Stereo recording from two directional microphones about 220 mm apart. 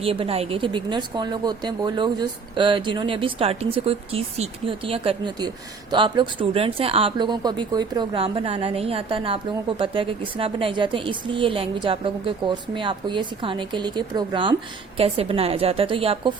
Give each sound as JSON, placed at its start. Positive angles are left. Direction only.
{"t": 0.0, "sound": "speech", "side_deg": -25}